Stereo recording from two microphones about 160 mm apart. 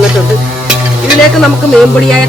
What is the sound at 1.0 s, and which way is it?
Speech, centre (ahead or behind).